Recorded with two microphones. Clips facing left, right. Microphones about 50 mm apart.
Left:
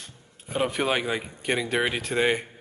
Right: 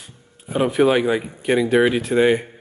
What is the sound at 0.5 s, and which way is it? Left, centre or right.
A man's voice, centre.